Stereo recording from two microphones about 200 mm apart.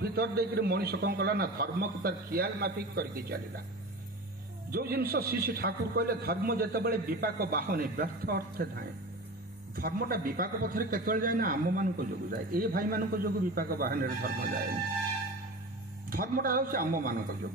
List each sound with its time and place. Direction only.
0.0 s a man's voice: 50° right (ahead or behind)
4.6 s a man's voice: 50° right (ahead or behind)
16.1 s a man's voice: 45° right (ahead or behind)